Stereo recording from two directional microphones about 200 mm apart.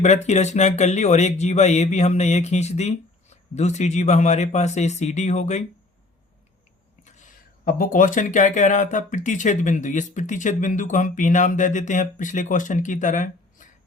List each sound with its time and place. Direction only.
0.0 s speech: 35° left (ahead or behind)
7.6 s speech: 45° left (ahead or behind)